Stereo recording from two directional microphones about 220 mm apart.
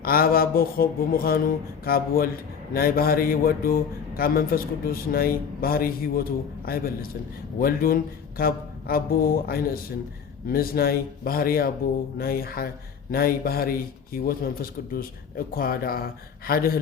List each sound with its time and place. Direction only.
0.0 s a man's voice: 40° left (ahead or behind)